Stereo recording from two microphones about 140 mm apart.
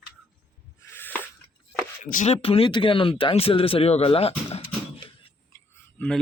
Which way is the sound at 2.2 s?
45° left (ahead or behind).